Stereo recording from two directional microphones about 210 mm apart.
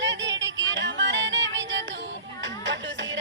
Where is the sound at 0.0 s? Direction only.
60° right (ahead or behind).